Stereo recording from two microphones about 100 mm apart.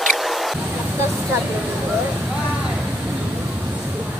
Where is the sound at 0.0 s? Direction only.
Centre (ahead or behind).